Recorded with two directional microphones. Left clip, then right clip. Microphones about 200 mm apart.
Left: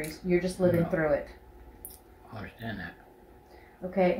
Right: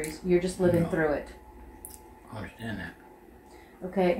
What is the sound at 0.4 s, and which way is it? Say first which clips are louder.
Speech: left 1 dB; 10° left (ahead or behind).